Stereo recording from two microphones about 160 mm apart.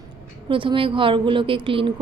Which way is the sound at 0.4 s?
30° right (ahead or behind).